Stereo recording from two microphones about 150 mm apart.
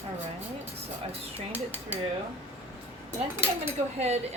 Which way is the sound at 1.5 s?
10° right (ahead or behind).